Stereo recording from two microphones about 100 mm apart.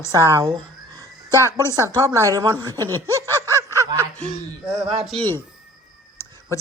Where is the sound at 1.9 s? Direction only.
30° right (ahead or behind).